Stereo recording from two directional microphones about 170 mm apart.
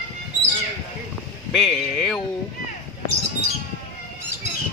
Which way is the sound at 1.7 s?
Centre (ahead or behind).